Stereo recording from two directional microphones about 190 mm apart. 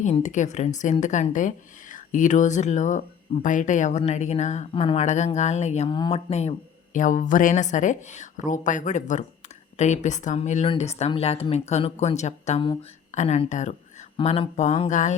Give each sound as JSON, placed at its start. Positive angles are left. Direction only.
{"t": 0.0, "sound": "a woman's voice", "side_deg": 40}
{"t": 6.9, "sound": "a woman's voice", "side_deg": 40}